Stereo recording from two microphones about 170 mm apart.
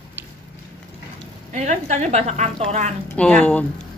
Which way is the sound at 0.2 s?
10° right (ahead or behind).